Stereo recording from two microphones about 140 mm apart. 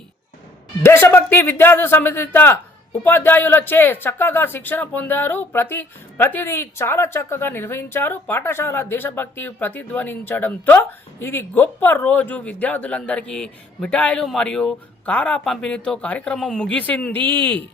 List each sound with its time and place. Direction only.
0.8 s speech: 15° left (ahead or behind)